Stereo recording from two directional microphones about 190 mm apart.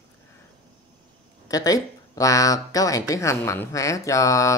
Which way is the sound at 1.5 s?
20° left (ahead or behind).